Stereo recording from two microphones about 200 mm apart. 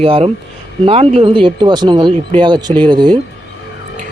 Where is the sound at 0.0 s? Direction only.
30° right (ahead or behind).